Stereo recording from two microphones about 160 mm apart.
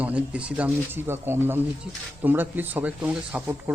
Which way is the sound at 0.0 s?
10° right (ahead or behind).